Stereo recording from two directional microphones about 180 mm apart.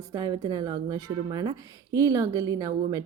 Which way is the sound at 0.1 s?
20° right (ahead or behind).